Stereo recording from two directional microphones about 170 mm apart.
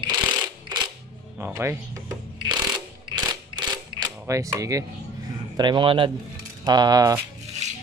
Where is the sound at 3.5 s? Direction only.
25° right (ahead or behind).